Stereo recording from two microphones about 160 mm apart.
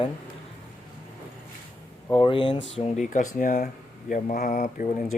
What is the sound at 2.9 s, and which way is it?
Speech, 55° left (ahead or behind).